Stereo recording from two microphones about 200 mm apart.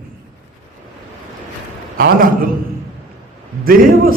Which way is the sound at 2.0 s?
50° right (ahead or behind).